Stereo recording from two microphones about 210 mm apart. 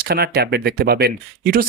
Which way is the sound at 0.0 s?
50° right (ahead or behind).